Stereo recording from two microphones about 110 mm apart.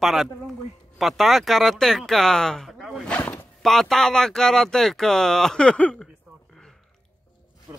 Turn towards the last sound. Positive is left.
turn(degrees=10)  # may be behind; listen again after turning